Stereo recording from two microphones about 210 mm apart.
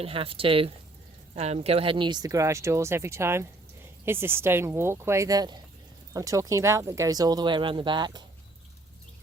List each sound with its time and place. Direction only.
0.0 s speech: 25° right (ahead or behind)